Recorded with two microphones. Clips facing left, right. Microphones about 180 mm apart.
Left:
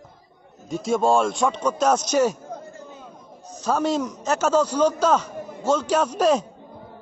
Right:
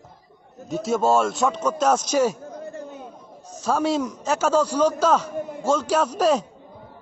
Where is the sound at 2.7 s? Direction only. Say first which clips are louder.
Right 5 dB; 65° right (ahead or behind).